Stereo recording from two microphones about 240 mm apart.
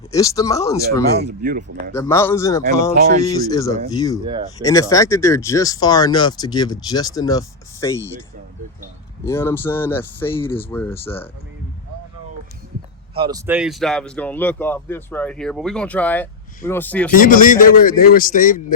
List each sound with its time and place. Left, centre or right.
0.1 s speech: centre
1.2 s speech: right
1.9 s speech: centre
2.9 s speech: right
3.2 s speech: centre
4.2 s speech: centre
4.5 s speech: centre
9.2 s speech: centre
13.1 s speech: centre
17.1 s a man's voice: left